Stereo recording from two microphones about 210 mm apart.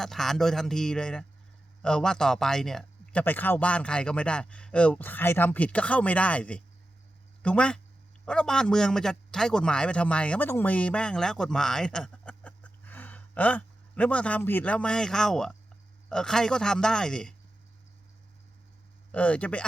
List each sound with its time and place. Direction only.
0.0 s a man's voice: centre (ahead or behind)
19.1 s speech: 5° left (ahead or behind)